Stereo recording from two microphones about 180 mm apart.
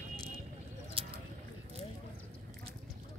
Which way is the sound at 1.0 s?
30° right (ahead or behind).